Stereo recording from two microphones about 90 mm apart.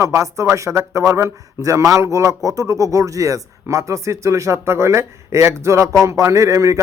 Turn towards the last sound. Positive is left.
turn(degrees=-35)  # may be behind; listen again after turning